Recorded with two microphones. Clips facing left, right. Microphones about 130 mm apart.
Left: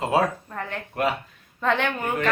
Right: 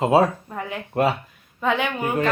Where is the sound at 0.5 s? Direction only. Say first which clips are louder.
Right 5 dB; 10° right (ahead or behind).